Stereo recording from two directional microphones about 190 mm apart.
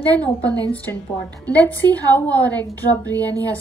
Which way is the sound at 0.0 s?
10° left (ahead or behind).